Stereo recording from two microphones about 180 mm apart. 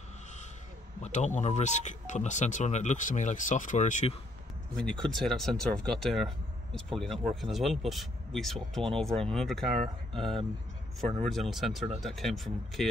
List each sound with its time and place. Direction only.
1.0 s speech: 40° left (ahead or behind)
4.7 s speech: 5° left (ahead or behind)